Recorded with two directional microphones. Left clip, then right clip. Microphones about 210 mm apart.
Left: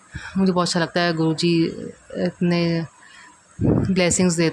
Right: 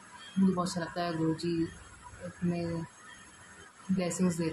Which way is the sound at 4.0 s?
45° left (ahead or behind).